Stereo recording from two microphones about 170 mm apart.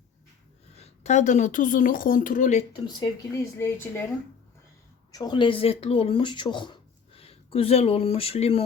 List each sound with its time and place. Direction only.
1.0 s speech: 45° left (ahead or behind)
2.8 s speech: 20° left (ahead or behind)
5.1 s speech: 25° left (ahead or behind)